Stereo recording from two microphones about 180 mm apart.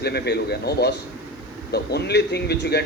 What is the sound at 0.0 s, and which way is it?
A man's voice, 65° left (ahead or behind).